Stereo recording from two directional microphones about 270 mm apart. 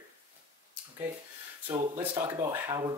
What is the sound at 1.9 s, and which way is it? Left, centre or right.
Speech, centre.